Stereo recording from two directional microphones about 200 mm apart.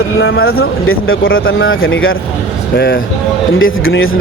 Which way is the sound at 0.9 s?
90° left.